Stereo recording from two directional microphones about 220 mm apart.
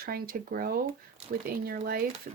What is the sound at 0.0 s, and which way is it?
Speech, 45° right (ahead or behind).